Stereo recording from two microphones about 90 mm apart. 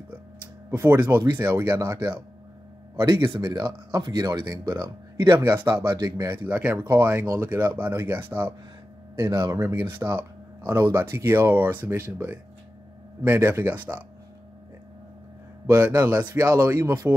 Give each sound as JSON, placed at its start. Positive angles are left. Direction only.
{"t": 0.7, "sound": "speech", "side_deg": -20}
{"t": 3.5, "sound": "speech", "side_deg": -50}
{"t": 5.6, "sound": "speech", "side_deg": -30}
{"t": 5.9, "sound": "speech", "side_deg": -50}
{"t": 6.2, "sound": "speech", "side_deg": -20}
{"t": 15.7, "sound": "speech", "side_deg": -20}